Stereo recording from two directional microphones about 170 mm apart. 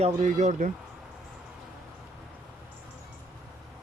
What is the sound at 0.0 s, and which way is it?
Speech, 45° right (ahead or behind).